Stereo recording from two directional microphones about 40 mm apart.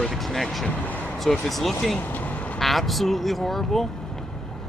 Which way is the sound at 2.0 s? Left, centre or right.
Left.